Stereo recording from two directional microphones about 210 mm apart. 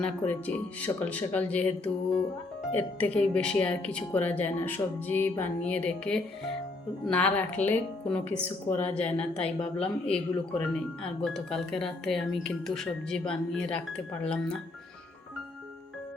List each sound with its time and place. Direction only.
0.0 s speech: 5° left (ahead or behind)